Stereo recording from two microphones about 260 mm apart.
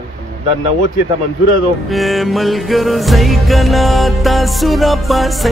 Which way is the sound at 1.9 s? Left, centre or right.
Centre.